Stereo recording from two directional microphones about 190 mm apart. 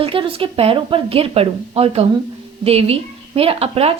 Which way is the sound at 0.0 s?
30° right (ahead or behind).